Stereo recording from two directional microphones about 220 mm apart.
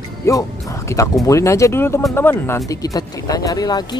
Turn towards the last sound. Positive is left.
turn(degrees=20)  # may be behind; listen again after turning